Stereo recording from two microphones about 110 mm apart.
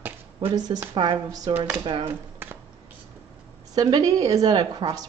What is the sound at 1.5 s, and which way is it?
Speech, 15° right (ahead or behind).